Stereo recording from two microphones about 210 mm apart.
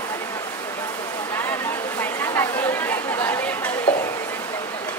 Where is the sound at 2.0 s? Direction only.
10° left (ahead or behind).